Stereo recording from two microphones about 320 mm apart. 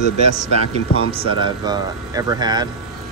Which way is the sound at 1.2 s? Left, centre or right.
Centre.